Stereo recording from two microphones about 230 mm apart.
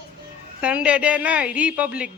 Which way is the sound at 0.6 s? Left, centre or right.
Centre.